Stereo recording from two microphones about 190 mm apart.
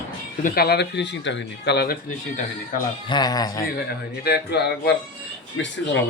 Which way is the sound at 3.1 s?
20° left (ahead or behind).